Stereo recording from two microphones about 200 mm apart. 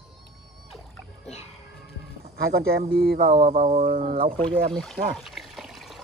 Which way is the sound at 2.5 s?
50° right (ahead or behind).